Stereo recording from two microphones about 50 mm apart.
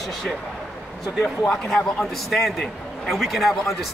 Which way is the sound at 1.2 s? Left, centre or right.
Centre.